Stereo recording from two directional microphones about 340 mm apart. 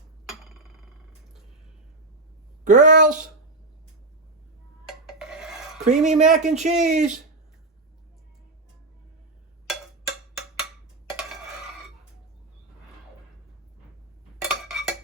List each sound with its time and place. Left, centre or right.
2.6 s speech: right
4.9 s filing: centre
5.8 s speech: right
9.6 s cowbell: centre
14.4 s a sound: centre